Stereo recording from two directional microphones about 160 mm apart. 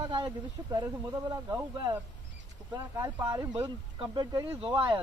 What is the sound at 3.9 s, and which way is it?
Speech, 30° right (ahead or behind).